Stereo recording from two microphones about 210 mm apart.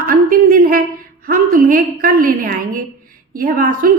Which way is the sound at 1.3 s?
40° right (ahead or behind).